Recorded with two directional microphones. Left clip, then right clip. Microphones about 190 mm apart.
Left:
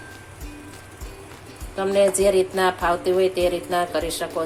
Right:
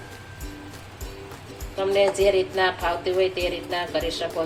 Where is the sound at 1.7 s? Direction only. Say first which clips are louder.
Left 2 dB; 45° left (ahead or behind).